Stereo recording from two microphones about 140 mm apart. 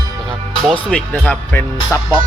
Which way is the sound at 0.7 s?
5° left (ahead or behind).